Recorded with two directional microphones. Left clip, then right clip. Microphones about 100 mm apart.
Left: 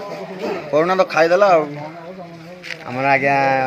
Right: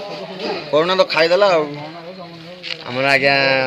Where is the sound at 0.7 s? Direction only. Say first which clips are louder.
Right 1 dB; 15° right (ahead or behind).